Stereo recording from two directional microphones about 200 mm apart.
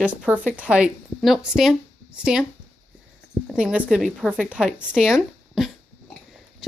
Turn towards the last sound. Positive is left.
turn(degrees=0)  # may be behind; listen again after turning